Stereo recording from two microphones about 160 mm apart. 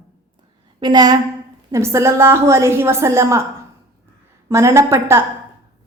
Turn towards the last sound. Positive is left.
turn(degrees=-15)  # may be behind; listen again after turning